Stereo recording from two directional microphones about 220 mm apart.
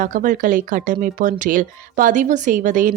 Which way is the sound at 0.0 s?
35° right (ahead or behind).